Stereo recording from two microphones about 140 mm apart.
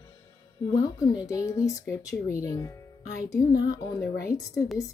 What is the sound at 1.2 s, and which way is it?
Speech, 25° left (ahead or behind).